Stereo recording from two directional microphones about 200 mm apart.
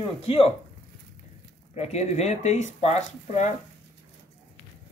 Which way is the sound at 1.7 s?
35° left (ahead or behind).